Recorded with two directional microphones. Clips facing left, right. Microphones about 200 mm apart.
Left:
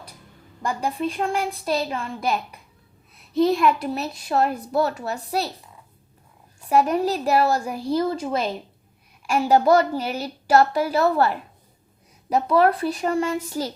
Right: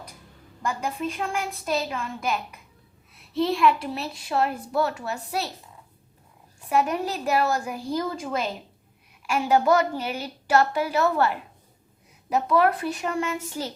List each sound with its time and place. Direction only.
0.6 s a child's voice: 35° left (ahead or behind)
6.7 s a child's voice: 35° left (ahead or behind)